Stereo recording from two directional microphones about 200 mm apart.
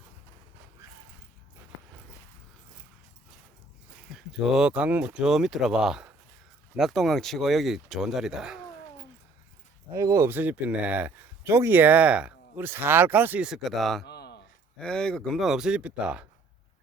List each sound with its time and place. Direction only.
4.1 s speech: centre (ahead or behind)
9.9 s speech: 15° right (ahead or behind); by 14.0 s centre (ahead or behind)
14.0 s a sound: 55° left (ahead or behind)
14.8 s speech: 5° left (ahead or behind)